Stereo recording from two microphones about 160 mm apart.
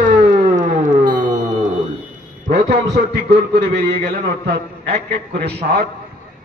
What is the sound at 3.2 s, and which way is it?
Speech, 90° right.